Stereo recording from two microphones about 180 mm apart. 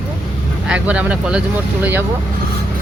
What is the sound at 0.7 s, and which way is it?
Speech, 5° right (ahead or behind).